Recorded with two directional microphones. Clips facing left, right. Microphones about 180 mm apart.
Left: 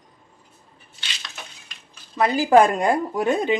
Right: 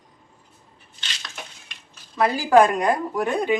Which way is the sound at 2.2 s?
20° left (ahead or behind).